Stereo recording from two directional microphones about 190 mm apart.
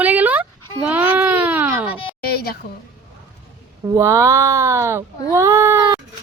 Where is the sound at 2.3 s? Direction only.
55° left (ahead or behind).